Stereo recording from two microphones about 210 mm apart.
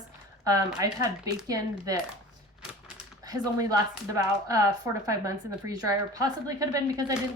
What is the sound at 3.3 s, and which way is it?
A woman's voice, 15° right (ahead or behind).